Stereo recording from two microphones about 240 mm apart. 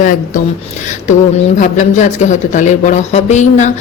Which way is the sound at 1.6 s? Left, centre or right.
Left.